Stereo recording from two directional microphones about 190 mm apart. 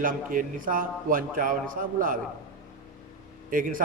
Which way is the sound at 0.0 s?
45° right (ahead or behind).